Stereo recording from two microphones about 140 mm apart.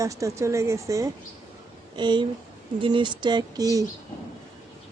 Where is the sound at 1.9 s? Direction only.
35° right (ahead or behind).